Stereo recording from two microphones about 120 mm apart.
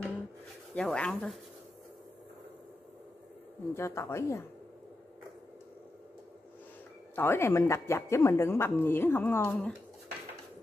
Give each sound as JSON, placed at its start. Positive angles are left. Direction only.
{"t": 0.7, "sound": "speech", "side_deg": 10}
{"t": 3.7, "sound": "speech", "side_deg": 20}
{"t": 7.2, "sound": "speech", "side_deg": 20}